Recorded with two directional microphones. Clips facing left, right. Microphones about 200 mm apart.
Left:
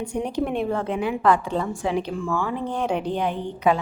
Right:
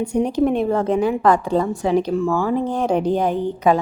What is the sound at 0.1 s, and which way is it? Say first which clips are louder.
A woman's voice: right 7 dB; 40° right (ahead or behind).